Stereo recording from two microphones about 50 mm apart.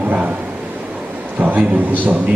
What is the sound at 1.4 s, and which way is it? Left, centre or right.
Speech, right.